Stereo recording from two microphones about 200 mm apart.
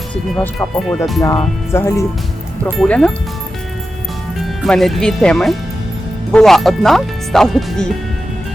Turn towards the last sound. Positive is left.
turn(degrees=0)  # may be behind; listen again after turning